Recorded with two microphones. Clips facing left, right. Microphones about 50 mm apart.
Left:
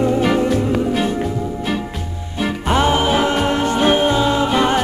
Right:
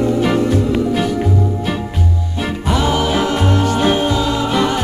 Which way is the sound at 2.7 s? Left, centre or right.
Left.